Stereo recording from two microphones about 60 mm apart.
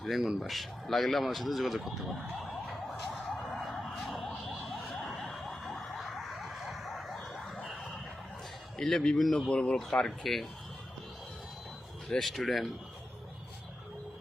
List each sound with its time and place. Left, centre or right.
0.0 s speech: centre
4.0 s a sound: centre
8.8 s a man's voice: centre
9.5 s speech: centre
10.1 s a man's voice: centre
12.2 s a man's voice: centre